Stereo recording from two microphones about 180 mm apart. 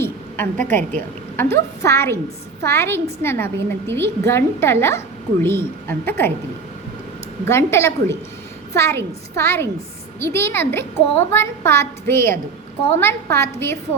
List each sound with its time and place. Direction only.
0.0 s a sound: 10° left (ahead or behind)
0.9 s a woman's voice: 10° left (ahead or behind)
7.4 s a child's voice: 15° left (ahead or behind)